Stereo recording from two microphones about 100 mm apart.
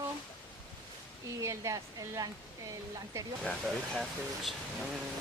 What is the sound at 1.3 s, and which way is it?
Speech, 30° right (ahead or behind).